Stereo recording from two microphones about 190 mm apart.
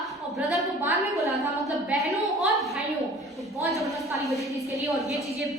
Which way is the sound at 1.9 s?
Centre (ahead or behind).